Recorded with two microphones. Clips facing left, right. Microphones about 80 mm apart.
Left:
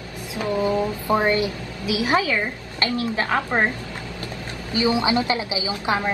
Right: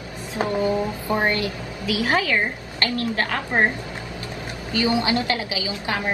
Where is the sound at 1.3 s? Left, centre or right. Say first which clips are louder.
Left 3 dB; left.